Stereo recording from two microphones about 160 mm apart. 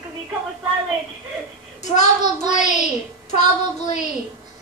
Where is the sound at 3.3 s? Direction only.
45° left (ahead or behind).